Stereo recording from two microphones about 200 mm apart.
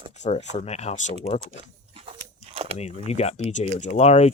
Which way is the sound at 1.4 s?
30° right (ahead or behind).